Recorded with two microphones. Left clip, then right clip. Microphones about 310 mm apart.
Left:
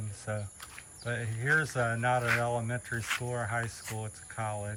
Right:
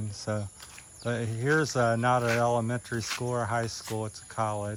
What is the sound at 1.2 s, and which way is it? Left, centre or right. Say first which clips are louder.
Cricket: right 1 dB; right.